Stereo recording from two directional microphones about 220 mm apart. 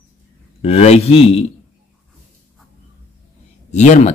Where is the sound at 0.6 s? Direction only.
30° left (ahead or behind).